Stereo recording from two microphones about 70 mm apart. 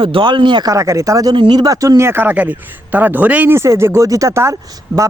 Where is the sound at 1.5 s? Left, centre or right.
Right.